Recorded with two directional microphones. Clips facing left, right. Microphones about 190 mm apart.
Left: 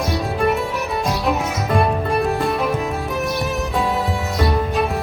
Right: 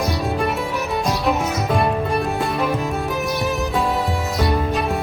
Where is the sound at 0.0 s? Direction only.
Centre (ahead or behind).